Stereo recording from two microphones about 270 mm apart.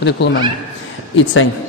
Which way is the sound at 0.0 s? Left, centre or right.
Left.